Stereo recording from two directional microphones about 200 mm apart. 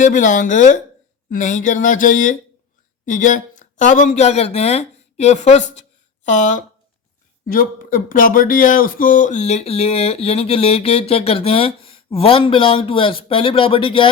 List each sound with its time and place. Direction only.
0.0 s speech: 40° left (ahead or behind)